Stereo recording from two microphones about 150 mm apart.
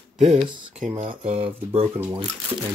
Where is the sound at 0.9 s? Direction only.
40° right (ahead or behind).